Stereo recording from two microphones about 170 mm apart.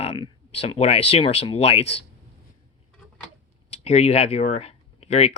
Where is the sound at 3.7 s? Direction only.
40° left (ahead or behind).